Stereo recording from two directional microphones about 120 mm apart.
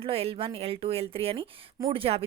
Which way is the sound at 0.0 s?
55° right (ahead or behind).